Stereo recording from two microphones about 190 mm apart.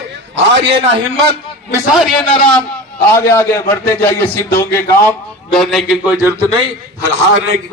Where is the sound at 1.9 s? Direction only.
Centre (ahead or behind).